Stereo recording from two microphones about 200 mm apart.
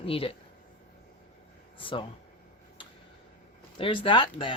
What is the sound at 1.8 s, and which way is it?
Speech, 25° left (ahead or behind).